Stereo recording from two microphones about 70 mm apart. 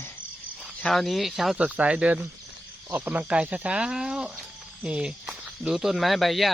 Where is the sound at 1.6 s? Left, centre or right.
Centre.